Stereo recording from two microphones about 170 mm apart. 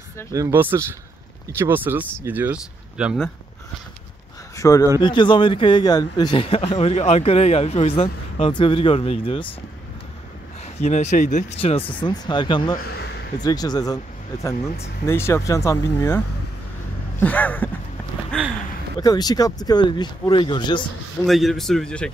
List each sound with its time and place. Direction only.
0.3 s speech: 15° right (ahead or behind)
4.6 s a man's voice: 20° left (ahead or behind)
10.8 s speech: 45° left (ahead or behind)
11.6 s speech: 30° left (ahead or behind)
12.7 s a sound: 70° left (ahead or behind)
13.4 s speech: 25° left (ahead or behind)
15.0 s speech: 15° left (ahead or behind)
17.2 s speech: 10° left (ahead or behind)
18.9 s speech: 25° left (ahead or behind)
21.3 s speech: centre (ahead or behind)